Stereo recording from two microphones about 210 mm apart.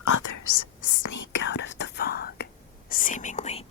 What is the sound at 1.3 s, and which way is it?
Whispering, 60° left (ahead or behind).